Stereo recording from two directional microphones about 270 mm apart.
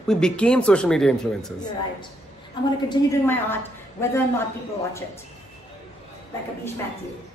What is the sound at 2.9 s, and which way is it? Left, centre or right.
Speech, centre.